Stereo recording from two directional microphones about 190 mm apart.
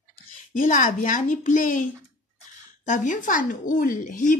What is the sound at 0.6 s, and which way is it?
A woman's voice, 45° left (ahead or behind).